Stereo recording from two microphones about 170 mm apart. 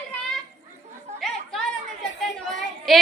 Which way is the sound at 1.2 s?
5° left (ahead or behind).